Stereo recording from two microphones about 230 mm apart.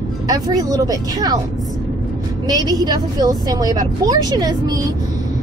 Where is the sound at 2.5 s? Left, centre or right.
Centre.